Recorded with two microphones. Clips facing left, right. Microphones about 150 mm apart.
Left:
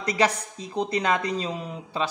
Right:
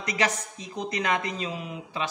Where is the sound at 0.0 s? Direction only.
30° left (ahead or behind).